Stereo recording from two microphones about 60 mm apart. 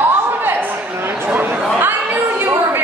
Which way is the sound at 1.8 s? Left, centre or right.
Right.